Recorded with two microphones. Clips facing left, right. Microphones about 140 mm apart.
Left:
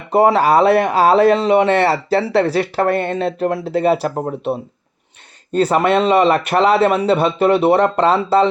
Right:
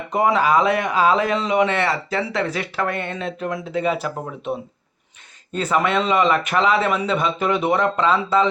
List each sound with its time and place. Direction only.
0.1 s speech: 35° left (ahead or behind)
5.5 s speech: 35° left (ahead or behind)